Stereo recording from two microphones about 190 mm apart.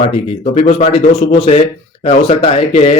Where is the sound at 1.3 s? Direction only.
35° left (ahead or behind).